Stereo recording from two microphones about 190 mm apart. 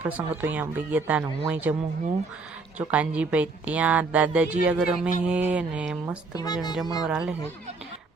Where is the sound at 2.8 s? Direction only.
5° right (ahead or behind).